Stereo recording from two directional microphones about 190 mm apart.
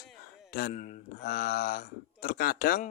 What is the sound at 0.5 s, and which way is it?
Speech, 45° left (ahead or behind).